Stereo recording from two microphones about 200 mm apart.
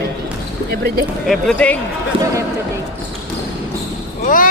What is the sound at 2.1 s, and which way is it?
Basketball bounce, 30° right (ahead or behind).